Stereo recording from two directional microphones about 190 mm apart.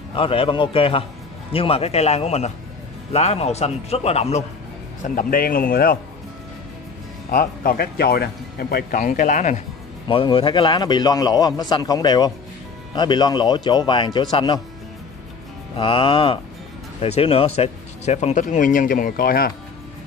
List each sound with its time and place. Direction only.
0.1 s a man's voice: 30° left (ahead or behind)
5.0 s speech: 50° left (ahead or behind)
7.2 s speech: 50° left (ahead or behind)
10.0 s a man's voice: 25° left (ahead or behind)
15.7 s a man's voice: 25° left (ahead or behind); by 19.5 s 50° left (ahead or behind)